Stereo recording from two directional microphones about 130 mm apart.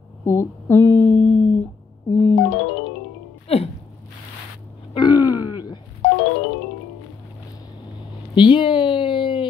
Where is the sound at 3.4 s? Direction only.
50° left (ahead or behind).